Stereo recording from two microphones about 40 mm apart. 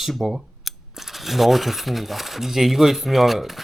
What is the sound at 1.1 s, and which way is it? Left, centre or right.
Speech, centre.